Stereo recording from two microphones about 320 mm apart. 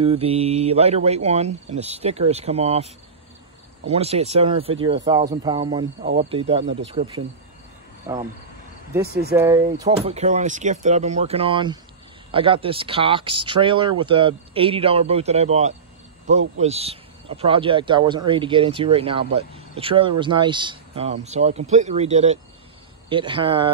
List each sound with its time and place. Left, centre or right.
0.0 s speech: centre
3.9 s speech: centre
8.1 s speech: centre
9.3 s speech: centre